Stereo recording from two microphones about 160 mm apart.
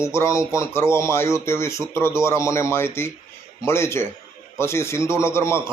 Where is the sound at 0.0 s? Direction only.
15° left (ahead or behind).